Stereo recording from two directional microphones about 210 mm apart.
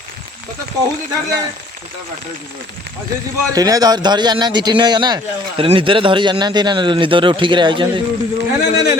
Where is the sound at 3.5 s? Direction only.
15° right (ahead or behind).